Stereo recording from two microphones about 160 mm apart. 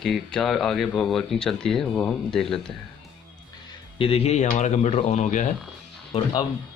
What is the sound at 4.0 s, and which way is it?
Speech, 40° left (ahead or behind).